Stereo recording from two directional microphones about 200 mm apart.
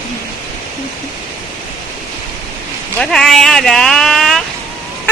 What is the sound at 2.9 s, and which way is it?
Speech, centre (ahead or behind).